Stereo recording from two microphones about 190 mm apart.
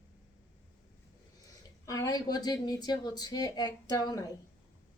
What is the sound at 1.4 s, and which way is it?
Speech, 15° left (ahead or behind).